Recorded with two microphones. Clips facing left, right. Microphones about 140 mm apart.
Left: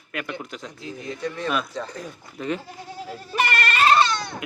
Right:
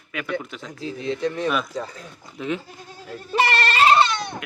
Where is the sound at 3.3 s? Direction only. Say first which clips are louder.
Right 3 dB; 30° right (ahead or behind).